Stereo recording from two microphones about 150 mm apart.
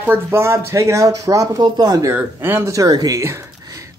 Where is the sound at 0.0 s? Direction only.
15° right (ahead or behind).